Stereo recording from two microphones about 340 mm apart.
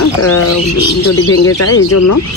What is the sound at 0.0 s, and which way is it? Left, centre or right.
Bird, left.